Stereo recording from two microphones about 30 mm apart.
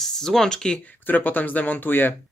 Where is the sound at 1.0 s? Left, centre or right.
Left.